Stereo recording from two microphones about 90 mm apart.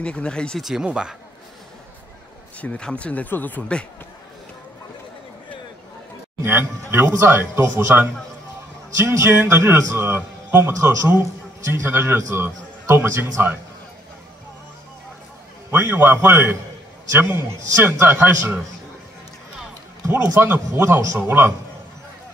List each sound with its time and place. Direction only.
0.0 s speech: 10° left (ahead or behind)
0.6 s speech: 5° right (ahead or behind)
2.6 s speech: 10° left (ahead or behind)
6.4 s a man's voice: 25° right (ahead or behind)
15.7 s a man's voice: 25° right (ahead or behind)
20.1 s a man's voice: 35° right (ahead or behind)